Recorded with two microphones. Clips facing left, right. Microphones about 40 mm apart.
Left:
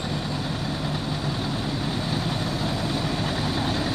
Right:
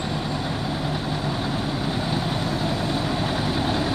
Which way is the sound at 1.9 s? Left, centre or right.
Centre.